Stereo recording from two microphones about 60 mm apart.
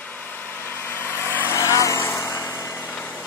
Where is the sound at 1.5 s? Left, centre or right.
Left.